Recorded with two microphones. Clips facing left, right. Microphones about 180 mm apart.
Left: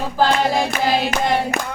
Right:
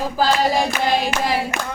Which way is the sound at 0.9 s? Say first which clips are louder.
Left 2 dB; 5° right (ahead or behind).